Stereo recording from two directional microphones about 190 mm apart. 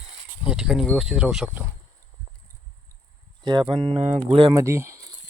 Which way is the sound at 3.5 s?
25° right (ahead or behind).